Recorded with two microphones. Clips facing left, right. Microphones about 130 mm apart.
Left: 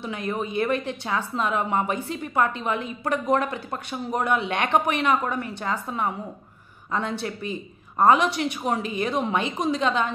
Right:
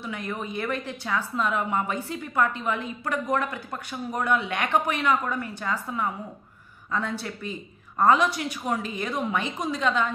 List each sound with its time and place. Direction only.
0.0 s a woman's voice: 20° left (ahead or behind)